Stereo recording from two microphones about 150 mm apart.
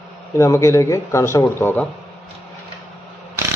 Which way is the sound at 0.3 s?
20° left (ahead or behind).